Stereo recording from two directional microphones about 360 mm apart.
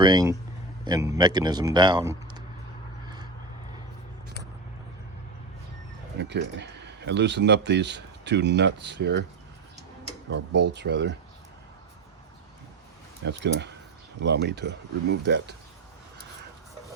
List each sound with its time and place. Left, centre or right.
0.0 s a man's voice: centre
6.1 s speech: right
10.6 s speech: right
13.2 s speech: right